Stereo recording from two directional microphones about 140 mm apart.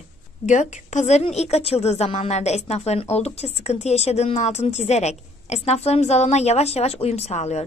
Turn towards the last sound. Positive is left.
turn(degrees=50)  # may be behind; listen again after turning